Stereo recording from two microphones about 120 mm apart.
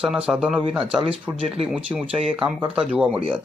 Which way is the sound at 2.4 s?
10° right (ahead or behind).